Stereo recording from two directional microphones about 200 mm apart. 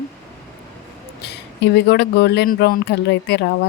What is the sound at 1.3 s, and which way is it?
Speech, 60° left (ahead or behind).